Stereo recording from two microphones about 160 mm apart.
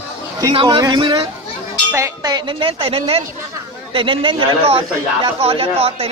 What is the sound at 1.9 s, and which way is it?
A man's voice, 20° right (ahead or behind).